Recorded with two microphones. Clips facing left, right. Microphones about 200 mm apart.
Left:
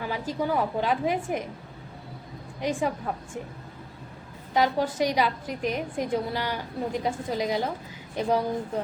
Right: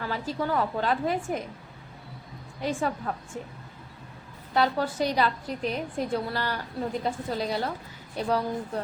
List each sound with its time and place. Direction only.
0.0 s a woman's voice: 15° left (ahead or behind)
2.6 s a woman's voice: 15° left (ahead or behind)
4.5 s a woman's voice: 15° left (ahead or behind)